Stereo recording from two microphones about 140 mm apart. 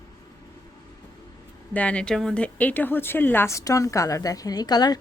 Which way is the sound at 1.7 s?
10° left (ahead or behind).